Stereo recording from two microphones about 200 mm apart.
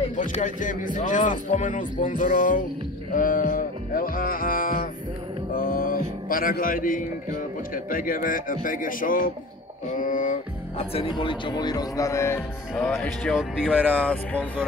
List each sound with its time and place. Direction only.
0.0 s speech: 35° left (ahead or behind)
3.1 s music: 45° left (ahead or behind)
5.5 s a sound: 45° left (ahead or behind)
7.7 s music: 45° left (ahead or behind)
9.9 s speech: 40° left (ahead or behind); by 12.4 s 15° left (ahead or behind)
12.7 s speech: 5° left (ahead or behind)
13.9 s speech: 5° left (ahead or behind)